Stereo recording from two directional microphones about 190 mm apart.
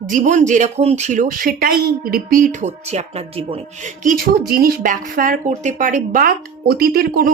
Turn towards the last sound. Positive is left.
turn(degrees=-55)  # may be behind; listen again after turning